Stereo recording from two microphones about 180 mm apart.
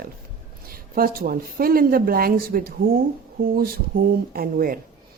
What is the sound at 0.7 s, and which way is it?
Speech, 55° right (ahead or behind).